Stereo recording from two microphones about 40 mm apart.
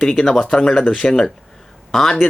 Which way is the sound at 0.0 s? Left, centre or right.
Centre.